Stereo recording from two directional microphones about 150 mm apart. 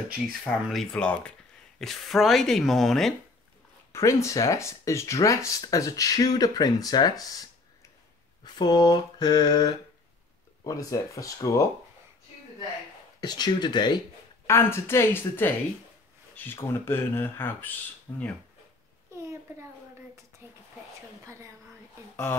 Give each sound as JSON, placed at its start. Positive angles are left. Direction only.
{"t": 0.7, "sound": "speech", "side_deg": 5}
{"t": 3.9, "sound": "speech", "side_deg": 20}
{"t": 13.2, "sound": "speech", "side_deg": 30}
{"t": 14.5, "sound": "speech", "side_deg": 15}
{"t": 19.5, "sound": "a sound", "side_deg": -20}
{"t": 22.1, "sound": "a sound", "side_deg": 15}